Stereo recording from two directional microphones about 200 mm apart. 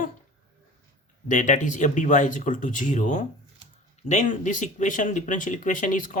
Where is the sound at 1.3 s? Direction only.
40° left (ahead or behind).